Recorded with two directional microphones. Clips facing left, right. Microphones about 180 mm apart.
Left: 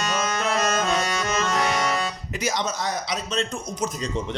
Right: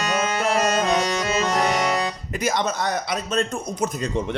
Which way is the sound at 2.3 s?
55° right (ahead or behind).